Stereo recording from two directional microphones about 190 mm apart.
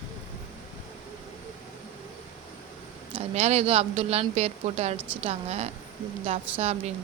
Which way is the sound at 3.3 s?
35° right (ahead or behind).